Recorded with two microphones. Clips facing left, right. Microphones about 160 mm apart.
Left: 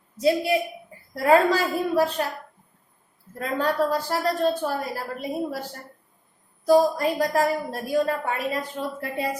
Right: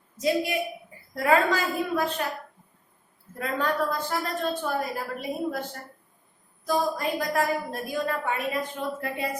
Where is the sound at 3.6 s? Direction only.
35° left (ahead or behind).